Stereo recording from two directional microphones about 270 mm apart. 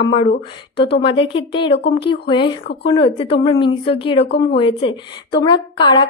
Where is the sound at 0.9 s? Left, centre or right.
Centre.